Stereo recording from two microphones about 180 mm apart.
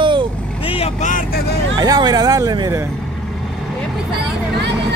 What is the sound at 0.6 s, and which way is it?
Speech, 30° left (ahead or behind).